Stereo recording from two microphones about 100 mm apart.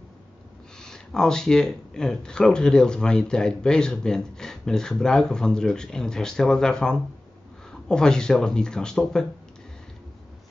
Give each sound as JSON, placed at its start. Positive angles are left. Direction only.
{"t": 0.7, "sound": "speech", "side_deg": 5}